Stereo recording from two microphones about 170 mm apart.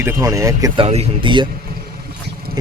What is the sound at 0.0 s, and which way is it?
Speech, 15° right (ahead or behind).